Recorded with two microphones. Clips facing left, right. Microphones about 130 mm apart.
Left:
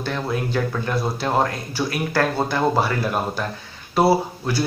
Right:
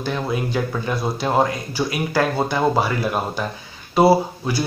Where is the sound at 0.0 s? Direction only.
10° right (ahead or behind).